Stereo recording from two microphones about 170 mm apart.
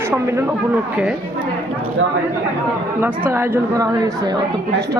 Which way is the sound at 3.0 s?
10° right (ahead or behind).